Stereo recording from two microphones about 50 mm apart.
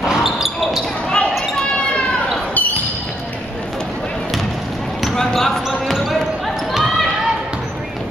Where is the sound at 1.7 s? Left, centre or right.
Left.